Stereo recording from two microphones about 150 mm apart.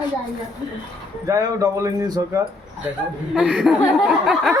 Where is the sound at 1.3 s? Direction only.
20° right (ahead or behind).